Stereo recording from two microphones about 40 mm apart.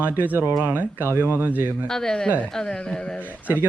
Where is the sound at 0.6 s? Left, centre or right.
Right.